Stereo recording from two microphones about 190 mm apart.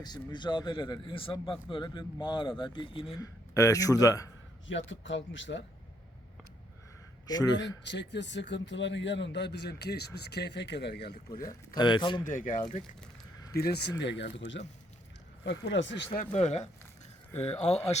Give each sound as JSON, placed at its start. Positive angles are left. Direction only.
{"t": 0.0, "sound": "speech", "side_deg": 25}
{"t": 3.2, "sound": "speech", "side_deg": 15}
{"t": 4.7, "sound": "a man's voice", "side_deg": 75}
{"t": 7.3, "sound": "a man's voice", "side_deg": 20}
{"t": 7.9, "sound": "a man's voice", "side_deg": 65}
{"t": 11.3, "sound": "speech", "side_deg": 20}
{"t": 12.2, "sound": "speech", "side_deg": 45}
{"t": 13.5, "sound": "a man's voice", "side_deg": 55}
{"t": 16.1, "sound": "speech", "side_deg": 35}